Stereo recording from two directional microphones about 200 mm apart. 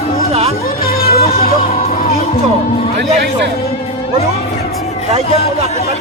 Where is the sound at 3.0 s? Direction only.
60° right (ahead or behind).